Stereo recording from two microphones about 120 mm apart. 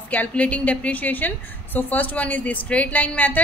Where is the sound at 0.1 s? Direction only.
10° left (ahead or behind).